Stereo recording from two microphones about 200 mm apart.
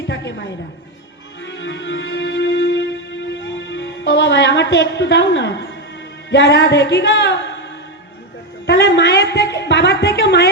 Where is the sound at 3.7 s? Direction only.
60° left (ahead or behind).